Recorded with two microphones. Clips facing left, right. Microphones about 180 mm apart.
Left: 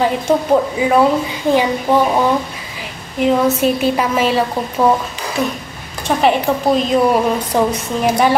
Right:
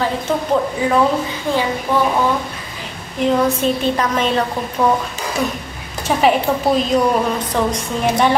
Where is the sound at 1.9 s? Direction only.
20° left (ahead or behind).